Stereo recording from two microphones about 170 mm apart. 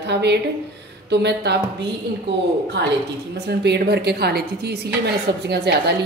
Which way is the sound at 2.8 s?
90° right.